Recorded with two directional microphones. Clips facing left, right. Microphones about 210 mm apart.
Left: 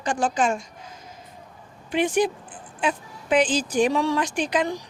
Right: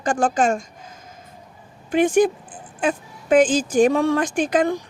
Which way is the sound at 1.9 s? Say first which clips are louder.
Right 5 dB; 50° right (ahead or behind).